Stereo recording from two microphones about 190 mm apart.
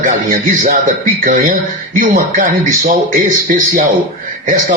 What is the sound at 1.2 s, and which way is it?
Speech, 45° right (ahead or behind).